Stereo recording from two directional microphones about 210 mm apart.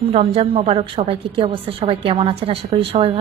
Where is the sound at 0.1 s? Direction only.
30° right (ahead or behind).